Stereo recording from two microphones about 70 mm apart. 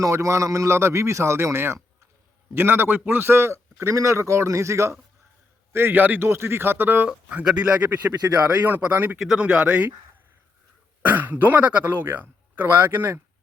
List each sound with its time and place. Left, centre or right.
0.0 s a man's voice: right
2.6 s a man's voice: right
5.7 s a man's voice: right
9.1 s speech: centre
9.4 s speech: centre
11.0 s speech: right